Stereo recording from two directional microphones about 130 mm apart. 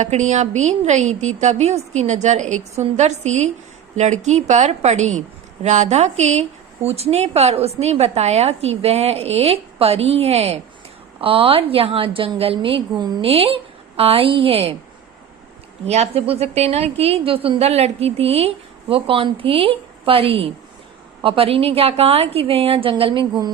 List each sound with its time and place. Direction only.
0.0 s a woman's voice: 65° right (ahead or behind)
15.9 s a woman's voice: 55° right (ahead or behind)